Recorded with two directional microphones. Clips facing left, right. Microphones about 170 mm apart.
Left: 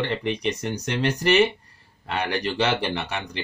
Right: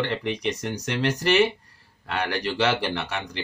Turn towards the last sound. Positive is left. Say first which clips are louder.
# even
turn(degrees=20)  # may be behind; listen again after turning